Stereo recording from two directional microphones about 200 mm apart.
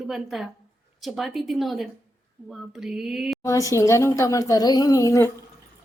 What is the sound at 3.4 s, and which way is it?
Speech, 15° left (ahead or behind).